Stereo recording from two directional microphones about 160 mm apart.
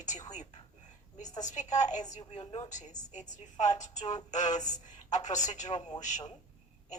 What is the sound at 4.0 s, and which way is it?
Music, 25° left (ahead or behind).